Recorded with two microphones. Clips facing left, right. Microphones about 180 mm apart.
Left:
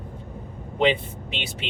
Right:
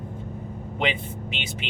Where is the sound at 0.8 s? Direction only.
35° left (ahead or behind).